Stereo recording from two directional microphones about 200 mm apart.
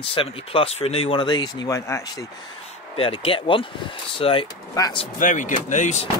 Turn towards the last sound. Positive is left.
turn(degrees=35)  # may be behind; listen again after turning